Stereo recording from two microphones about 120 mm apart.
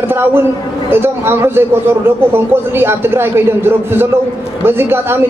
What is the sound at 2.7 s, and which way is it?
Speech, 20° right (ahead or behind).